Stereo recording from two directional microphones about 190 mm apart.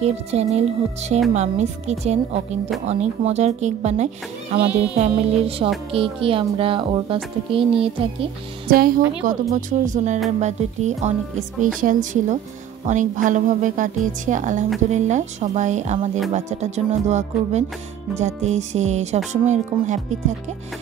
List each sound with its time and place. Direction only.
0.0 s speech: 35° right (ahead or behind)
4.6 s speech: 5° right (ahead or behind)
4.9 s a child's voice: 35° right (ahead or behind)
8.6 s speech: 50° right (ahead or behind)